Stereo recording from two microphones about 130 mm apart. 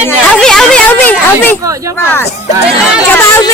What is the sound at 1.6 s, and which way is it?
Speech, 25° right (ahead or behind).